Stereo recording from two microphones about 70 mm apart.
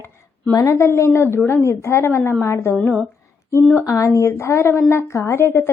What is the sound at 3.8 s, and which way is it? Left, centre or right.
Speech, left.